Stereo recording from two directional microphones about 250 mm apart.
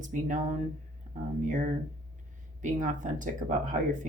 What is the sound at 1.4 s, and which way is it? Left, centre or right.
A woman's voice, right.